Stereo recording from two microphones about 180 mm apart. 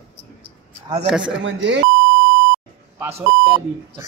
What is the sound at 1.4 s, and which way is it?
Speech, 90° right.